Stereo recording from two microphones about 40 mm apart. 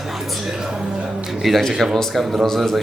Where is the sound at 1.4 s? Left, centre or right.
Centre.